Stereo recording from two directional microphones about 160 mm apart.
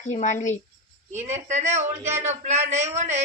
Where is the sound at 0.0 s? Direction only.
50° left (ahead or behind).